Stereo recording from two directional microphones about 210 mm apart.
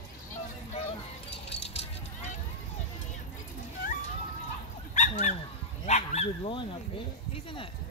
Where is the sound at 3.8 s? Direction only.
40° left (ahead or behind).